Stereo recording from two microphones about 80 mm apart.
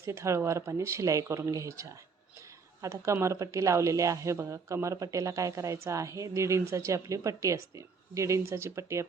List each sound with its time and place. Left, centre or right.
0.0 s speech: right